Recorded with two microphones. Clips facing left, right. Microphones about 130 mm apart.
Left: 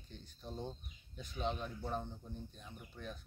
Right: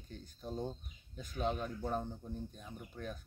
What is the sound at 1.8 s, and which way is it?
Speech, 10° right (ahead or behind).